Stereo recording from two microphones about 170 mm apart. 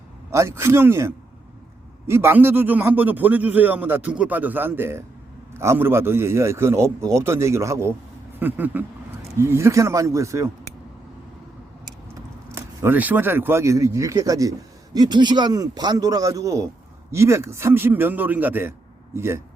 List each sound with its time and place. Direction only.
0.3 s a man's voice: 15° right (ahead or behind)
12.5 s a man's voice: 15° right (ahead or behind)